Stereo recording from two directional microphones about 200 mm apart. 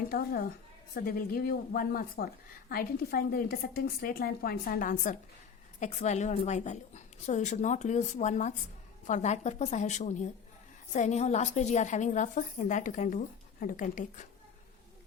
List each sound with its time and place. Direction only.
0.1 s a woman's voice: 45° left (ahead or behind)